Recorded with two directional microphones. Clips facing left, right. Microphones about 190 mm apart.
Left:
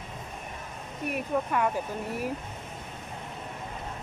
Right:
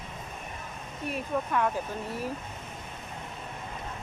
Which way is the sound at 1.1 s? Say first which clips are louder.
Left 1 dB; 10° left (ahead or behind).